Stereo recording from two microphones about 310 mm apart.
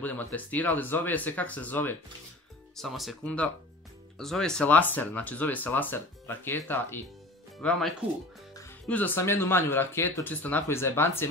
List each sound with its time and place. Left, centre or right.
0.0 s speech: centre